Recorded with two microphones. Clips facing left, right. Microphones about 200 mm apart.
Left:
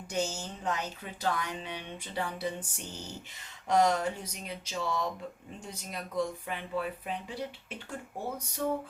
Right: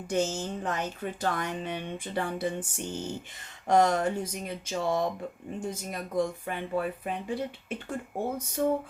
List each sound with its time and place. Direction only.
0.1 s speech: 50° right (ahead or behind)
8.6 s speech: 50° right (ahead or behind)